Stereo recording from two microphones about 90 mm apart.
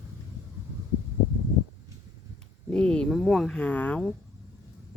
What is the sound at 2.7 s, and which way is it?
Speech, 10° left (ahead or behind).